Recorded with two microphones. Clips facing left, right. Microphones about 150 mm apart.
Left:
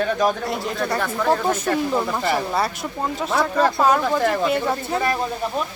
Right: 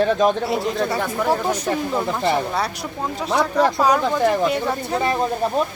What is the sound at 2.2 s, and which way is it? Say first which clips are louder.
Speech: right 2 dB; 25° right (ahead or behind).